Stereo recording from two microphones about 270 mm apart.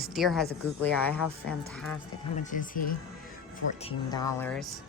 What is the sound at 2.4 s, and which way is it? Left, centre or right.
Speech, left.